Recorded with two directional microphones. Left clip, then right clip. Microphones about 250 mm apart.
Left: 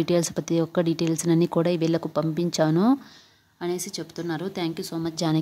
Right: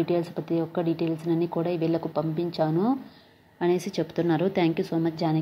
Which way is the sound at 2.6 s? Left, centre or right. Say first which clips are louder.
Left 4 dB; left.